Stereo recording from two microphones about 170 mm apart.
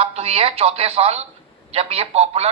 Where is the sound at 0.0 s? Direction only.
35° right (ahead or behind).